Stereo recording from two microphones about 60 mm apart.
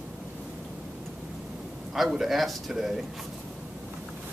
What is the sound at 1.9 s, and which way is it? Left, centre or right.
A man's voice, centre.